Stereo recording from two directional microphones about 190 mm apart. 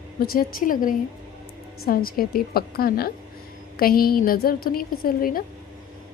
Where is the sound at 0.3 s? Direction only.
50° left (ahead or behind).